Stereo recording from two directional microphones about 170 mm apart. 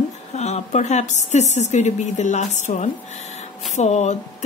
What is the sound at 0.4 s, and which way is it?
A woman's voice, 40° left (ahead or behind).